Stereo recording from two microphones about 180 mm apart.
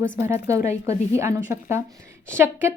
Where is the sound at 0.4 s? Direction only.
15° right (ahead or behind).